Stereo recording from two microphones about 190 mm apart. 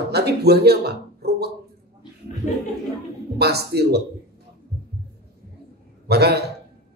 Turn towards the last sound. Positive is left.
turn(degrees=-60)  # may be behind; listen again after turning